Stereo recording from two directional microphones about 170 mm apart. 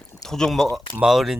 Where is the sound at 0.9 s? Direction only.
5° right (ahead or behind).